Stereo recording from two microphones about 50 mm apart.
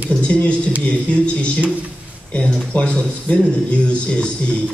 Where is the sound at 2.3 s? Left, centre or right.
Left.